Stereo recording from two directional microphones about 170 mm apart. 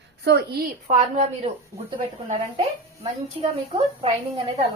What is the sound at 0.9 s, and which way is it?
A woman's voice, 45° right (ahead or behind).